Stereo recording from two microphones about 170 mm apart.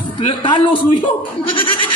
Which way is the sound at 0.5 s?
30° left (ahead or behind).